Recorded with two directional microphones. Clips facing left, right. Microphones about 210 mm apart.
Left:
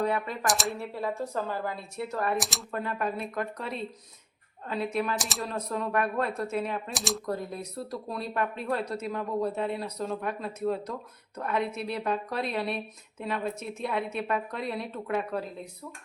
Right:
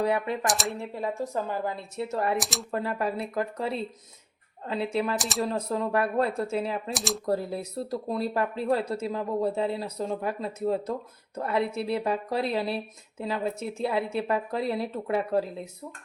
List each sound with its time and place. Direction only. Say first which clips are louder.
0.4 s speech: even; centre (ahead or behind)
0.7 s speech: right 1 dB; 15° right (ahead or behind)
2.4 s speech: right 2 dB; centre (ahead or behind)
2.7 s speech: right 2 dB; 30° right (ahead or behind)
5.1 s speech: right 3 dB; centre (ahead or behind)
5.4 s speech: right 4 dB; 30° right (ahead or behind)
6.9 s speech: right 2 dB; centre (ahead or behind)
7.3 s speech: right 5 dB; 30° right (ahead or behind)